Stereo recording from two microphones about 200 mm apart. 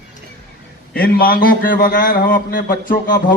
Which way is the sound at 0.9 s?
50° left (ahead or behind).